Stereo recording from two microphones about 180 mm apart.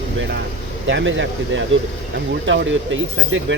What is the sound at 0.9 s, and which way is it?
Speech, 85° right.